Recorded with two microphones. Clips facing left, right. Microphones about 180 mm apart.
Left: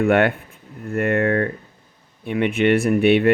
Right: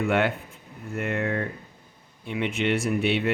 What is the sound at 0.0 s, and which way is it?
Speech, 60° left (ahead or behind).